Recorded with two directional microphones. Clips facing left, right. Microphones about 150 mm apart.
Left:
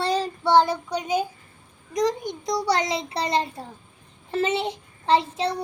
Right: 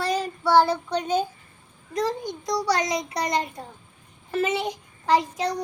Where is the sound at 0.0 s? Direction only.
25° left (ahead or behind); by 1.3 s 10° left (ahead or behind).